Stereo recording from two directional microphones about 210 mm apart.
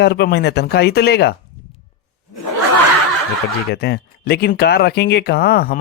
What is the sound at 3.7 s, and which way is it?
Speech, 50° left (ahead or behind).